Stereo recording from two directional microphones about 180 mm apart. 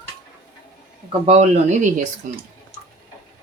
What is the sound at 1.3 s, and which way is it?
A man's voice, 40° right (ahead or behind).